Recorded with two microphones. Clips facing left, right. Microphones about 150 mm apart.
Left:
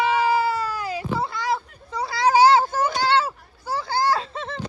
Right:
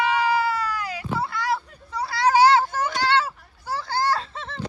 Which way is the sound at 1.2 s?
20° left (ahead or behind).